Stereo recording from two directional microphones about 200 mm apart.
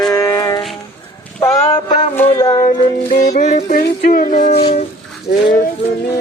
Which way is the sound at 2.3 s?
15° left (ahead or behind).